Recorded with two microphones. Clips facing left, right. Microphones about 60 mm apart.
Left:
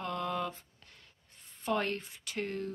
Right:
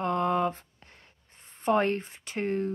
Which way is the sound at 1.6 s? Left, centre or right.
Right.